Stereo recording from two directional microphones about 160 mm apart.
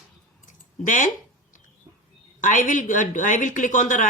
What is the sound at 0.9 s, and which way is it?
Speech, 55° left (ahead or behind).